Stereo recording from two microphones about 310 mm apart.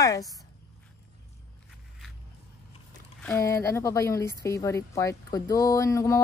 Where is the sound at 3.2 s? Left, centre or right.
Centre.